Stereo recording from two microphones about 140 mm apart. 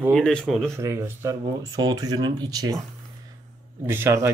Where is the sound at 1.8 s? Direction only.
30° right (ahead or behind).